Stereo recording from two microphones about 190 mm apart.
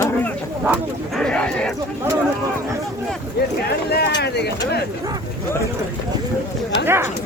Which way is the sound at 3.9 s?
60° left (ahead or behind).